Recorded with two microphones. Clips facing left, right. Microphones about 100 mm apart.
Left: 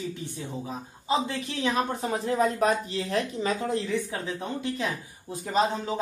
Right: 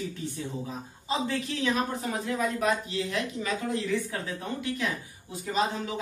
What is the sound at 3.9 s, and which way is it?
Speech, 25° left (ahead or behind).